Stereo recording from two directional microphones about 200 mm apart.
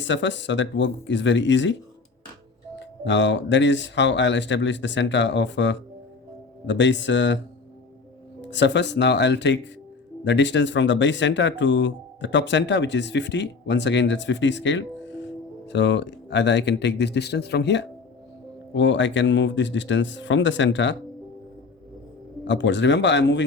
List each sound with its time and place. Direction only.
0.1 s speech: 65° left (ahead or behind)
2.7 s speech: 65° left (ahead or behind)
8.4 s speech: 60° left (ahead or behind)
22.4 s speech: 65° left (ahead or behind)